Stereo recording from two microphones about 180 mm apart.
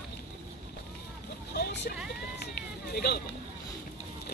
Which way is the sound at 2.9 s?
60° left (ahead or behind).